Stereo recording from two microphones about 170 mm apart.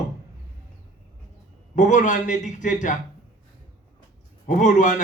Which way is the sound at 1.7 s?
50° left (ahead or behind).